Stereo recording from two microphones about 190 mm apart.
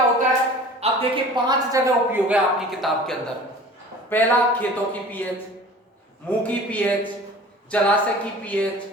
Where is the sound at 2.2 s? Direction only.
5° right (ahead or behind).